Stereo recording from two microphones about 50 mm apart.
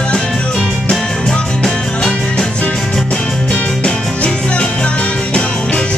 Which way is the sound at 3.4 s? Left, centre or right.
Left.